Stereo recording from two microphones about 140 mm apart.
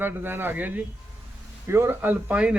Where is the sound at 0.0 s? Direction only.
15° right (ahead or behind).